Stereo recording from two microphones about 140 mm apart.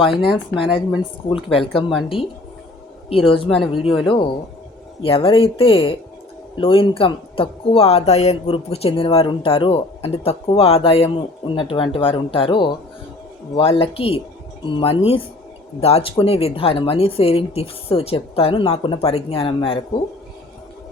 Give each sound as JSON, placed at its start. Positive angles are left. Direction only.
{"t": 0.1, "sound": "speech", "side_deg": 40}
{"t": 1.7, "sound": "speech", "side_deg": 0}
{"t": 3.2, "sound": "speech", "side_deg": 40}
{"t": 3.5, "sound": "speech", "side_deg": 0}
{"t": 4.0, "sound": "speech", "side_deg": 35}